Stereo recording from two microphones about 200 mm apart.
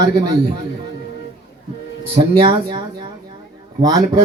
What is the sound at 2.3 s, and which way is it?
Speech, 25° right (ahead or behind).